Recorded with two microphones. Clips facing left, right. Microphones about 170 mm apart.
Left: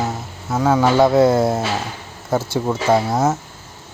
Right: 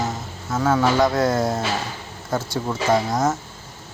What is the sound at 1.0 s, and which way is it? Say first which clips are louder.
Speech: left 6 dB; 25° left (ahead or behind).